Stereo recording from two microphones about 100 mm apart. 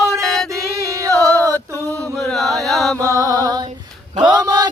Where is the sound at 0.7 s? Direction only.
30° right (ahead or behind).